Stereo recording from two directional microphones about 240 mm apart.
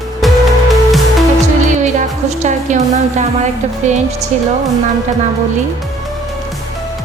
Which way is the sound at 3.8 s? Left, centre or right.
Right.